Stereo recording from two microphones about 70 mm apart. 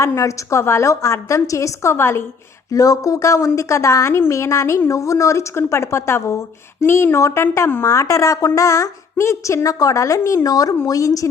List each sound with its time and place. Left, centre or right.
0.0 s a woman's voice: left
2.7 s a woman's voice: left
9.7 s a woman's voice: left